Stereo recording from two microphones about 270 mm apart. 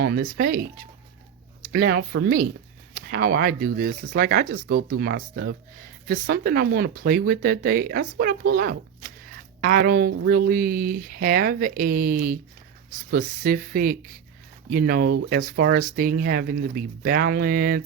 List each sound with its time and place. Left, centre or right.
0.0 s speech: right
1.7 s speech: right